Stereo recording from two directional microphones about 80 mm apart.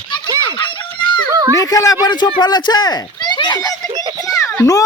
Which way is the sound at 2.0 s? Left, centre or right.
Left.